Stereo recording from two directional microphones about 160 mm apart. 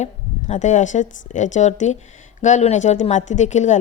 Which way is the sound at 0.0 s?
45° left (ahead or behind).